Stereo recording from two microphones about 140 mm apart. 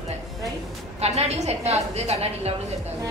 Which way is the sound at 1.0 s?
50° right (ahead or behind).